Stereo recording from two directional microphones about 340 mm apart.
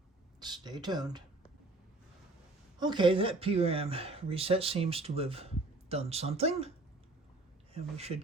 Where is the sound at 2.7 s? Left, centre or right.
Centre.